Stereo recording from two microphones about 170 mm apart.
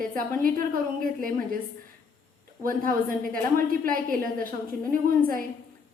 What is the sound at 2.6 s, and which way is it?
A woman's voice, 55° right (ahead or behind).